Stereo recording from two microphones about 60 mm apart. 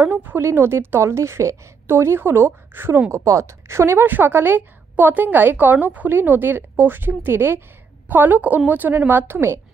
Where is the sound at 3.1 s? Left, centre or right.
Right.